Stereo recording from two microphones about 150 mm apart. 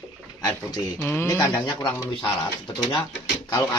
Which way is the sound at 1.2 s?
25° left (ahead or behind).